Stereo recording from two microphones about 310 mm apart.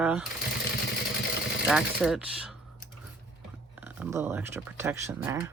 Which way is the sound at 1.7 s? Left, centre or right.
Centre.